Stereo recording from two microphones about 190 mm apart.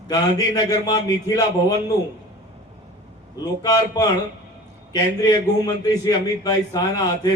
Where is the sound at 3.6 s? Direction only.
20° left (ahead or behind).